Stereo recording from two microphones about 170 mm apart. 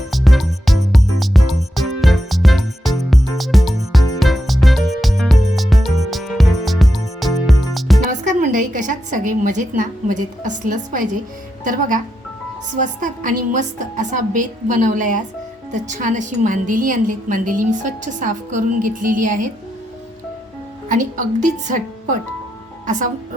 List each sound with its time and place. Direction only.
0.1 s music: centre (ahead or behind)
8.0 s a woman's voice: 50° right (ahead or behind)
20.9 s a woman's voice: 50° right (ahead or behind)